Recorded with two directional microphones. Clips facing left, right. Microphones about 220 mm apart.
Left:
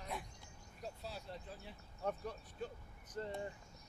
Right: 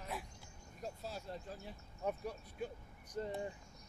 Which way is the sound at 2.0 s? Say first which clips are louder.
Right 1 dB; 10° right (ahead or behind).